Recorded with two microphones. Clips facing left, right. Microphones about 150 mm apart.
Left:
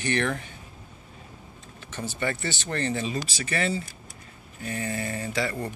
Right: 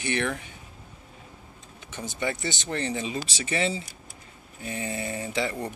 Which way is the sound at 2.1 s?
15° right (ahead or behind).